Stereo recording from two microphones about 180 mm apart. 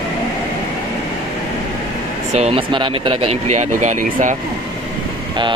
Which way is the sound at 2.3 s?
35° right (ahead or behind).